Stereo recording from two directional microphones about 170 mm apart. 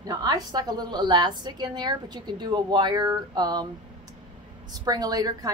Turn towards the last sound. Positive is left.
turn(degrees=-20)  # may be behind; listen again after turning